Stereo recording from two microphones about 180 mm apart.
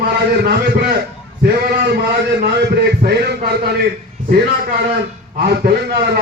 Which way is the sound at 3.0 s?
65° right (ahead or behind).